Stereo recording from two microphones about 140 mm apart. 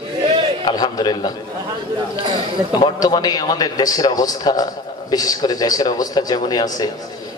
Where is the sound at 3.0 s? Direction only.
30° left (ahead or behind).